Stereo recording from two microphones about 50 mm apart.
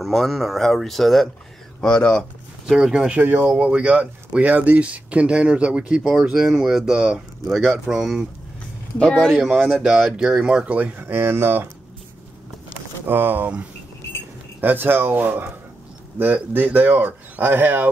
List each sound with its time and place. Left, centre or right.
0.0 s speech: centre
1.9 s speech: centre
2.8 s speech: centre
3.2 s speech: right
3.5 s speech: right
9.3 s speech: centre
10.4 s speech: right
11.0 s speech: right
13.0 s speech: right
14.6 s speech: right